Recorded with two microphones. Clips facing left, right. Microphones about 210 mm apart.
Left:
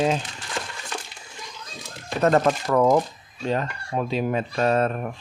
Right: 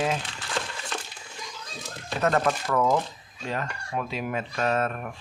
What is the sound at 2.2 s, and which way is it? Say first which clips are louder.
Speech: left 5 dB; 35° left (ahead or behind).